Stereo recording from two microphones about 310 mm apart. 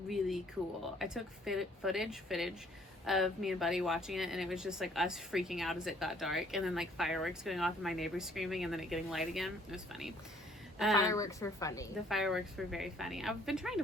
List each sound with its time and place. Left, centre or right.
0.1 s speech: centre
10.9 s a woman's voice: centre
12.0 s speech: centre